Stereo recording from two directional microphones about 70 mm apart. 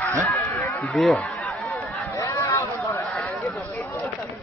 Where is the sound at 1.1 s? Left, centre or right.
Centre.